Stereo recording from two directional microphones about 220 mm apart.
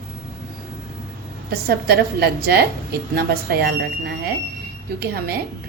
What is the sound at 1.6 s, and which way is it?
A woman's voice, 45° right (ahead or behind).